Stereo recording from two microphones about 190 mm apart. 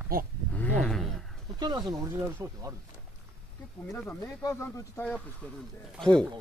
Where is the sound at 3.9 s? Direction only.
15° left (ahead or behind).